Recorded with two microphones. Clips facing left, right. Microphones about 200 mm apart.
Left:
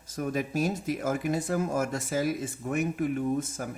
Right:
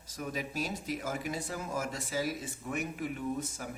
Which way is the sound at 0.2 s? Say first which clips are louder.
Left 8 dB; 50° left (ahead or behind).